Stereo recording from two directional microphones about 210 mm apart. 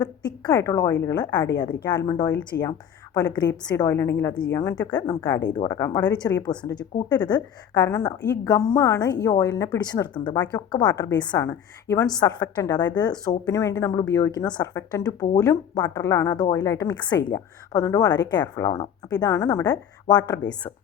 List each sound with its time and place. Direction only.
0.0 s a woman's voice: 20° left (ahead or behind)